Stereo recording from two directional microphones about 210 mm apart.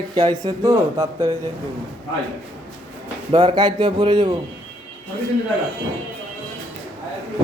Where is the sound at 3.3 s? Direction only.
25° right (ahead or behind).